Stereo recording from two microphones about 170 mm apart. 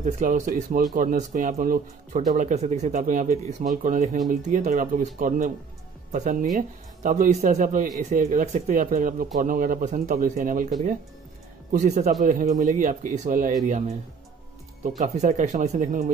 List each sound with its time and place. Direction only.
0.0 s speech: 50° right (ahead or behind)
7.0 s speech: 50° right (ahead or behind)
11.7 s speech: 45° right (ahead or behind)
15.0 s speech: 45° right (ahead or behind)